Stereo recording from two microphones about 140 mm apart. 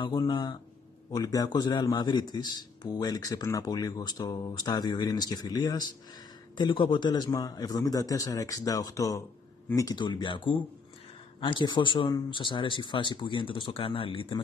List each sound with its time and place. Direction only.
0.0 s a man's voice: 30° left (ahead or behind)
9.9 s speech: 35° left (ahead or behind)